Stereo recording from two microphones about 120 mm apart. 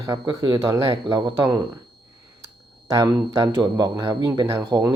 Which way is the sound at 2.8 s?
30° right (ahead or behind).